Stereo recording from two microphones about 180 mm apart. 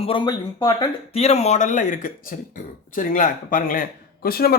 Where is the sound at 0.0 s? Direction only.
30° left (ahead or behind).